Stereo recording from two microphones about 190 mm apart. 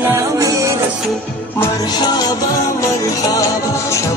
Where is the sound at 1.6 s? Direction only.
20° left (ahead or behind).